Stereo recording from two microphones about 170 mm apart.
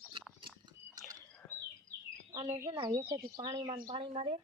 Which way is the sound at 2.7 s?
25° right (ahead or behind).